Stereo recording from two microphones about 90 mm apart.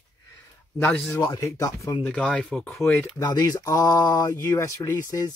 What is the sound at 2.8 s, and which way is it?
Speech, 30° left (ahead or behind).